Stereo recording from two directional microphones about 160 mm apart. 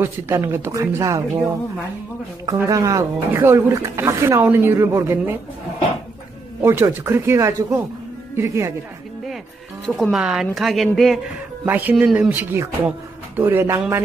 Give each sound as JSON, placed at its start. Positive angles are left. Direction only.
{"t": 0.0, "sound": "speech", "side_deg": -15}
{"t": 2.4, "sound": "speech", "side_deg": -20}
{"t": 6.6, "sound": "speech", "side_deg": -15}
{"t": 9.8, "sound": "a woman's voice", "side_deg": 5}
{"t": 11.6, "sound": "speech", "side_deg": -10}